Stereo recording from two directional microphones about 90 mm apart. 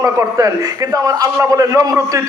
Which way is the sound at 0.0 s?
35° right (ahead or behind).